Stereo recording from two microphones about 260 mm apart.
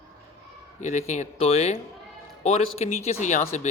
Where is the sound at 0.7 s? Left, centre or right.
Left.